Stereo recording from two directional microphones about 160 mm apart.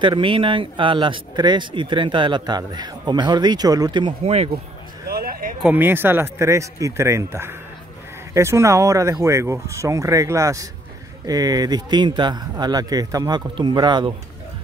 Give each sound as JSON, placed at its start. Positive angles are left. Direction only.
{"t": 0.0, "sound": "speech", "side_deg": -30}
{"t": 5.0, "sound": "a sound", "side_deg": -70}
{"t": 5.6, "sound": "a man's voice", "side_deg": -10}